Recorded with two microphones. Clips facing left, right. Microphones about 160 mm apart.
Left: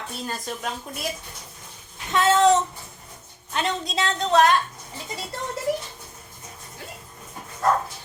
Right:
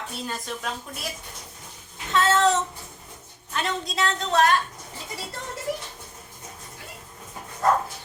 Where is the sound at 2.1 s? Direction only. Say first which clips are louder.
Left 2 dB; 15° left (ahead or behind).